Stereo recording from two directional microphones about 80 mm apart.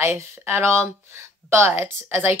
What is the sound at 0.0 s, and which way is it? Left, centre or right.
Speech, right.